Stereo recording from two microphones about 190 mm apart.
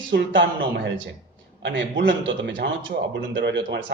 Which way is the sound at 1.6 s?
70° right (ahead or behind).